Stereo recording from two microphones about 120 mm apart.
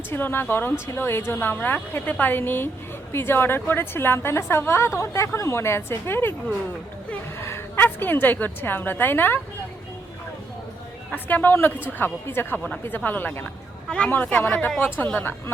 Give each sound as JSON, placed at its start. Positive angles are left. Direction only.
{"t": 0.1, "sound": "a woman's voice", "side_deg": 20}
{"t": 7.3, "sound": "a woman's voice", "side_deg": 20}
{"t": 11.1, "sound": "a woman's voice", "side_deg": 15}